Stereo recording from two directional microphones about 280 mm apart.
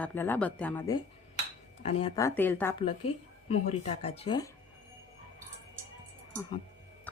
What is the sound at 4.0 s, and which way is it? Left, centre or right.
Speech, centre.